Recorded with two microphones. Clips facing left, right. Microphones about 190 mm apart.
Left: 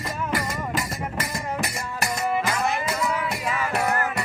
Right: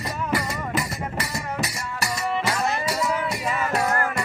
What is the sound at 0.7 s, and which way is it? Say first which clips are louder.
Music: right 1 dB; 50° left (ahead or behind).